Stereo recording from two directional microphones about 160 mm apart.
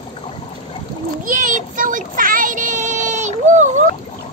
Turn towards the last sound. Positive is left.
turn(degrees=-50)  # may be behind; listen again after turning